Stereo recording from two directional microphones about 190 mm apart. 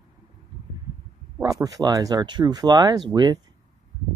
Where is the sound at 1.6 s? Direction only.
20° right (ahead or behind).